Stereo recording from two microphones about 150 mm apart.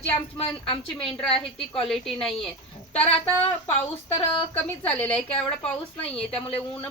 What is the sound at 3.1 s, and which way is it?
Speech, 45° left (ahead or behind).